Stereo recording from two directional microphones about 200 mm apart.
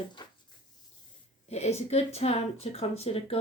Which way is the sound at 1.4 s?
35° left (ahead or behind).